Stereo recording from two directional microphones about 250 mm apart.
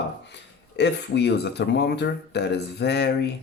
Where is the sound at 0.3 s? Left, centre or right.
Left.